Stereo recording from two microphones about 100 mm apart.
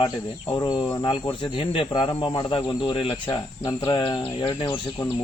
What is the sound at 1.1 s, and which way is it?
Speech, 60° left (ahead or behind).